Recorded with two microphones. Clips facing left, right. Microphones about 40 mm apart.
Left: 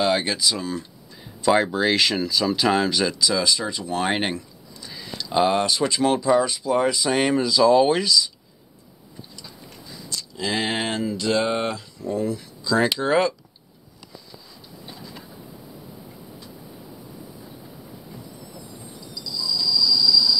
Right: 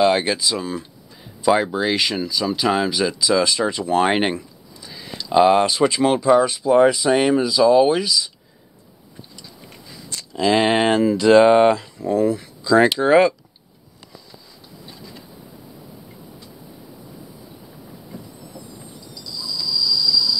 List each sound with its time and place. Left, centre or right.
0.0 s speech: centre
1.8 s speech: centre
3.4 s speech: right
4.0 s speech: centre
7.1 s speech: centre
10.3 s speech: right
19.8 s train: centre